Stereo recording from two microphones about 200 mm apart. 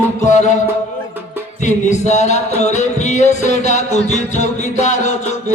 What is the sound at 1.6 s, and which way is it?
Music, 35° left (ahead or behind).